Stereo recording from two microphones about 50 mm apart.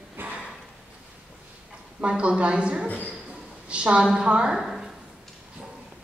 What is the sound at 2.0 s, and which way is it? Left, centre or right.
A woman's voice, right.